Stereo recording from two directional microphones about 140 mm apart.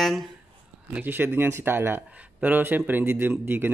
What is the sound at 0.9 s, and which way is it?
Speech, 15° right (ahead or behind).